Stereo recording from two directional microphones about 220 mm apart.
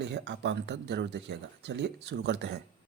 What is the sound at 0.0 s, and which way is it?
Speech, 50° right (ahead or behind).